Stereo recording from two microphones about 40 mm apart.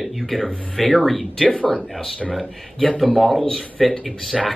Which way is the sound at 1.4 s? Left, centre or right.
Left.